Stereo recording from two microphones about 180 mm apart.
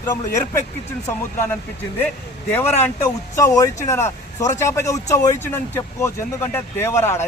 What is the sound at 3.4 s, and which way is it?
Speech, 15° left (ahead or behind).